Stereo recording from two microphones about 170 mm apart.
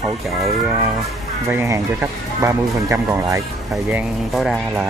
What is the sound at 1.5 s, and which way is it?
Speech, 15° right (ahead or behind).